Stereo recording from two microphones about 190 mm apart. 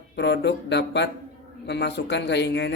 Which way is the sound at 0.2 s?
65° left (ahead or behind).